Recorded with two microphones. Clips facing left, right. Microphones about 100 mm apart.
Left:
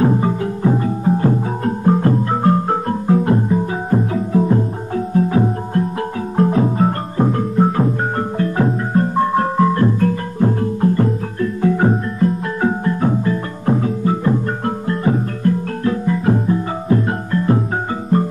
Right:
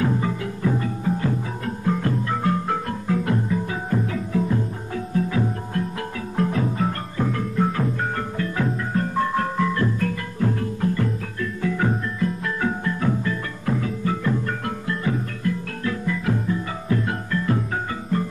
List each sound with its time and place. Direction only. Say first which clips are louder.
0.0 s music: left 7 dB; 35° left (ahead or behind)